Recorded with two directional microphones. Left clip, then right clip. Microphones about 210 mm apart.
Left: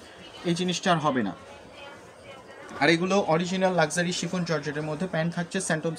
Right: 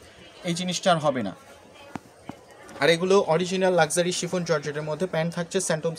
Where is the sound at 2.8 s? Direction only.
55° right (ahead or behind).